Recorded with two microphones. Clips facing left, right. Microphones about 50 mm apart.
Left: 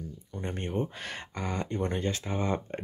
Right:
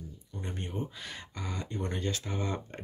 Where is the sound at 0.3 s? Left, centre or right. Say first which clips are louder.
Left 5 dB; left.